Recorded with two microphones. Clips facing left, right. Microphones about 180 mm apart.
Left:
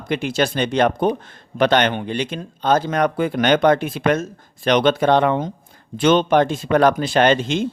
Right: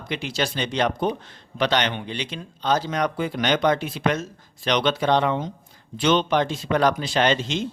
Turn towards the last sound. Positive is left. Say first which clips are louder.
# left 5 dB
turn(degrees=55)  # may be behind; listen again after turning